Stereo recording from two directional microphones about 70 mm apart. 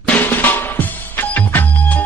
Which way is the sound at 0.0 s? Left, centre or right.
Left.